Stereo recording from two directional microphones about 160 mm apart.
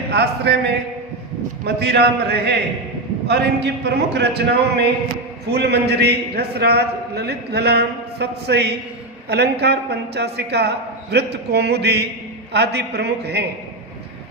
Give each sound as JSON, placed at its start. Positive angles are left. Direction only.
{"t": 0.1, "sound": "a man's voice", "side_deg": -90}